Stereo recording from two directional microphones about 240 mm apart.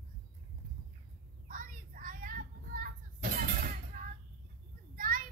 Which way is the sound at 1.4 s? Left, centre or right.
Right.